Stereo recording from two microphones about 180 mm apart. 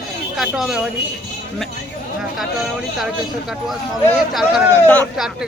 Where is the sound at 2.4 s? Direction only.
Centre (ahead or behind).